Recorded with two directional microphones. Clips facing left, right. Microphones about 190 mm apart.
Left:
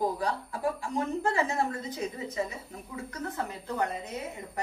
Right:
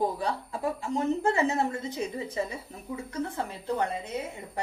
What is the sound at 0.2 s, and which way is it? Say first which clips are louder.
Speech: even; 25° right (ahead or behind).